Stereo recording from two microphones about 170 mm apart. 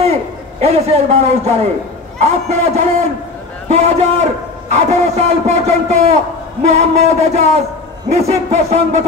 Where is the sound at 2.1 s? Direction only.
40° right (ahead or behind).